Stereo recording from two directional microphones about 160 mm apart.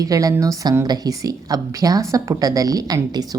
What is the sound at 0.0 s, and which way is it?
A woman's voice, 20° right (ahead or behind).